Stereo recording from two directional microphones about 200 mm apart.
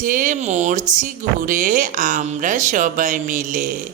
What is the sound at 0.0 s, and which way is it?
Speech, 40° right (ahead or behind).